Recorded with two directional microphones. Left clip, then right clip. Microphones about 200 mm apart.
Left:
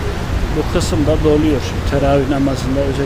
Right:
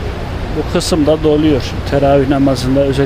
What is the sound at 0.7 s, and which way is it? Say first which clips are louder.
Speech: right 6 dB; 20° right (ahead or behind).